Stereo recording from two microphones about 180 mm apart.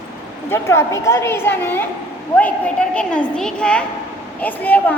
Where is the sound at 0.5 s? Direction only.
15° left (ahead or behind).